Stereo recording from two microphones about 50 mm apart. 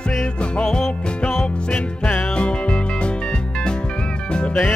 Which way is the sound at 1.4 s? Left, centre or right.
Left.